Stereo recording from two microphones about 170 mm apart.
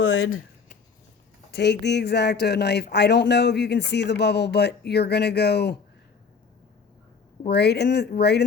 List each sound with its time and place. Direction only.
1.5 s speech: 80° left
7.4 s speech: 75° left (ahead or behind)